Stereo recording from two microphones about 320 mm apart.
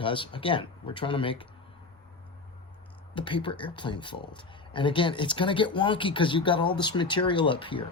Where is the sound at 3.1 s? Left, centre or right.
Centre.